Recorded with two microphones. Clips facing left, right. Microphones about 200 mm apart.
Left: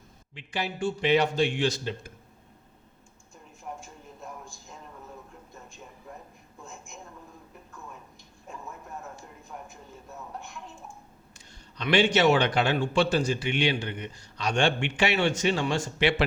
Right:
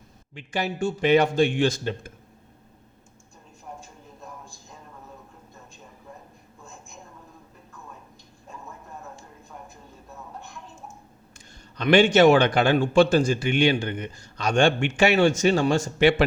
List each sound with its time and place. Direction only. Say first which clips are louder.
0.3 s a man's voice: right 5 dB; 45° right (ahead or behind)
11.3 s a man's voice: right 5 dB; 50° right (ahead or behind)